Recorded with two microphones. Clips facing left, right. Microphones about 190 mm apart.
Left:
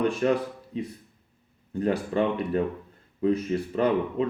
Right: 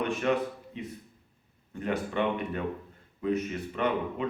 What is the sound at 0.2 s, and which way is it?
Speech, 35° left (ahead or behind).